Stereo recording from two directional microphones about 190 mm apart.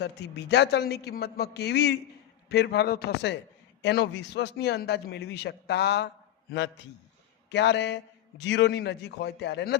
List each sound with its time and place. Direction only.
0.0 s a man's voice: 60° left (ahead or behind)